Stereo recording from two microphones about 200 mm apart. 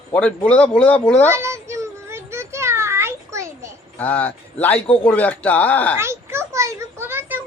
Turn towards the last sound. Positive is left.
turn(degrees=-10)  # may be behind; listen again after turning